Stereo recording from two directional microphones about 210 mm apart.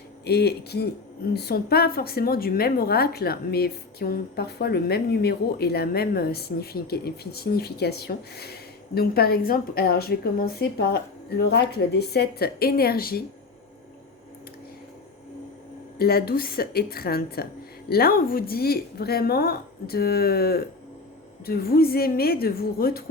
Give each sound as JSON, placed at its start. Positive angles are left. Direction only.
{"t": 0.3, "sound": "a woman's voice", "side_deg": 50}
{"t": 16.0, "sound": "a woman's voice", "side_deg": 45}